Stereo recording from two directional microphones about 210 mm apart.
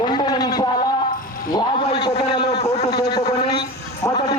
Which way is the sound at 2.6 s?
30° left (ahead or behind).